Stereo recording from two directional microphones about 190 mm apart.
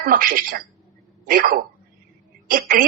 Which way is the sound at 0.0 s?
50° right (ahead or behind).